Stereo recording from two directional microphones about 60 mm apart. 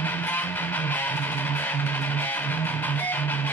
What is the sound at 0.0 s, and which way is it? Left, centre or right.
Music, left.